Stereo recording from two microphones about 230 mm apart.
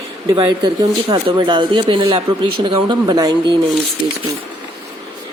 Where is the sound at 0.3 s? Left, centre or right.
Centre.